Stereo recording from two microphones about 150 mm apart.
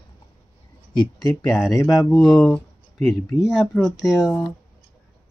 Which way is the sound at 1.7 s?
20° left (ahead or behind).